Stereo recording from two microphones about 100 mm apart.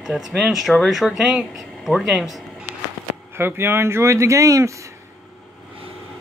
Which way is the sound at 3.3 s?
25° right (ahead or behind).